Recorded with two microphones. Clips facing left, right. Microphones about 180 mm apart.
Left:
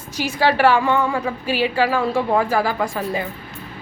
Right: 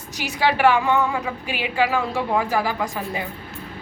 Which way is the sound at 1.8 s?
15° right (ahead or behind).